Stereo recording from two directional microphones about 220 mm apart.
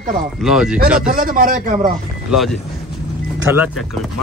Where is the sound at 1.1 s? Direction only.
40° right (ahead or behind).